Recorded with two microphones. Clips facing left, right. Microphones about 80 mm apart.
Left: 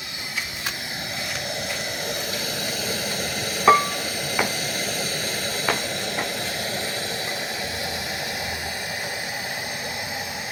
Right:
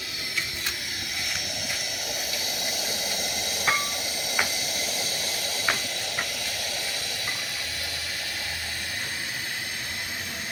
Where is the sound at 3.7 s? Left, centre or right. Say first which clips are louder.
Left 12 dB; left.